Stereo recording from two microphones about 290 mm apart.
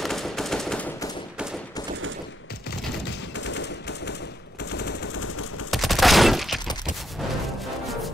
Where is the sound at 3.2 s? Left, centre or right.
Left.